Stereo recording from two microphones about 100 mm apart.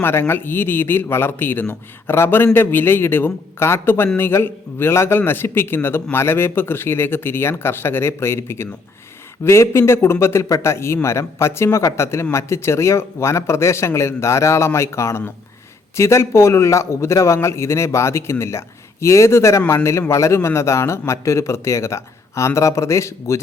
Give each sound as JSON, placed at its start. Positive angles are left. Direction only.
{"t": 0.0, "sound": "a man's voice", "side_deg": 25}